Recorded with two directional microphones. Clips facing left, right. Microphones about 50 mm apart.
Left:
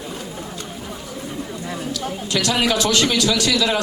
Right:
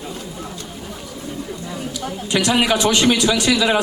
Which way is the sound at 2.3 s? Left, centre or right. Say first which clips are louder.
Right 3 dB; right.